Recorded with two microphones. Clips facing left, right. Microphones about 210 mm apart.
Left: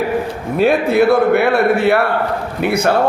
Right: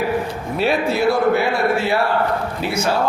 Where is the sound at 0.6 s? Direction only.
55° left (ahead or behind).